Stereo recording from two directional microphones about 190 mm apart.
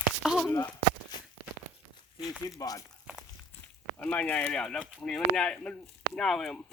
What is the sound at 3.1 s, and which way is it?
Walk, 5° right (ahead or behind).